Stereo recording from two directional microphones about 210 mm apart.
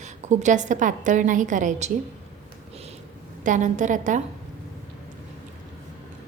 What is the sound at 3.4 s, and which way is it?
Speech, 35° right (ahead or behind).